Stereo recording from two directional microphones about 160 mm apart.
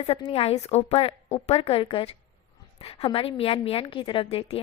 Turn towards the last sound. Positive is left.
turn(degrees=35)  # may be behind; listen again after turning